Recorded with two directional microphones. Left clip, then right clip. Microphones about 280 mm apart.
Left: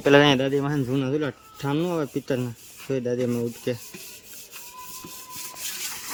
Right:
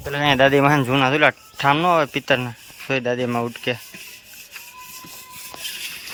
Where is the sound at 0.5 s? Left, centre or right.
Right.